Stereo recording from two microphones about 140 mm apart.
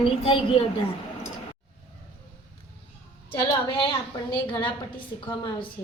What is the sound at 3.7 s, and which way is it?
A woman's voice, 40° left (ahead or behind).